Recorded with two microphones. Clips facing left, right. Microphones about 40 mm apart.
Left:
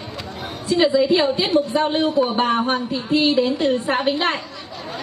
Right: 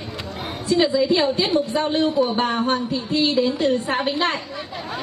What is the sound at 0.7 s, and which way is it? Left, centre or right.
A woman's voice, centre.